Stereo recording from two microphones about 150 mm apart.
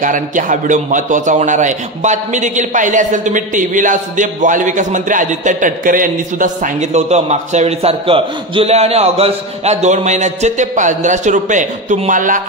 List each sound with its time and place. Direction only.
0.0 s a man's voice: 60° right (ahead or behind)